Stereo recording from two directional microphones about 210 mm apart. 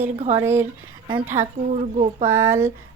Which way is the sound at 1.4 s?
35° right (ahead or behind).